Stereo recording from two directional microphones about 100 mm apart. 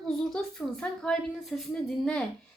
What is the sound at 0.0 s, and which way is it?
A woman's voice, 5° left (ahead or behind).